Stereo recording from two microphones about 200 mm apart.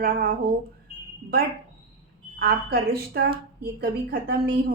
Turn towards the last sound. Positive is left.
turn(degrees=-50)  # may be behind; listen again after turning